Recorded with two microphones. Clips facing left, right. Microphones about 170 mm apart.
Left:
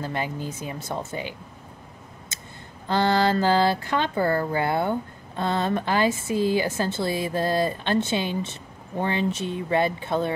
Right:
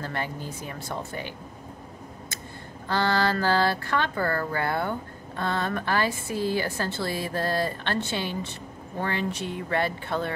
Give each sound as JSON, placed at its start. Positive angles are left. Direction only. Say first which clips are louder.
{"t": 0.0, "sound": "speech", "louder": "left 3 dB", "side_deg": 15}
{"t": 2.9, "sound": "speech", "louder": "left 3 dB", "side_deg": 20}